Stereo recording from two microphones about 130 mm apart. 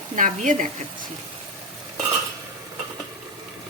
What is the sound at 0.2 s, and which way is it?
Speech, 90° right.